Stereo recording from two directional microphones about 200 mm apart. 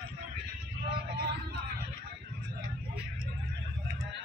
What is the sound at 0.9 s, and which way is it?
Vehicle, 50° right (ahead or behind).